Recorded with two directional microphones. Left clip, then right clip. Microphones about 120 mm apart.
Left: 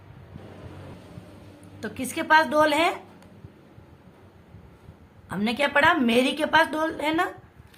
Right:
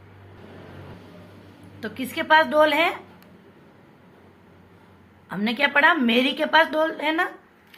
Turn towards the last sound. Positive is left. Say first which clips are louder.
# right 2 dB
turn(degrees=25)  # may be behind; listen again after turning